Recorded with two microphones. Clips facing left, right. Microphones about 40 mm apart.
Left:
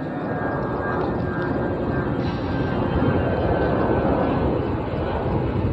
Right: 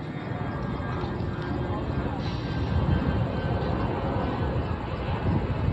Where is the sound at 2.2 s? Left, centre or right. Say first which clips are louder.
Left 7 dB; centre.